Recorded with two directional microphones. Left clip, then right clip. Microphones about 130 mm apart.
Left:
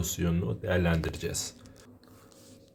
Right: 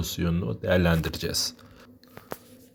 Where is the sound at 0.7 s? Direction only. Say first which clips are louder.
Right 6 dB; 50° right (ahead or behind).